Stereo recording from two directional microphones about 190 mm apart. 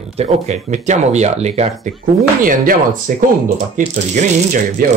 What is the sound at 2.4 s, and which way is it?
Speech, 45° right (ahead or behind).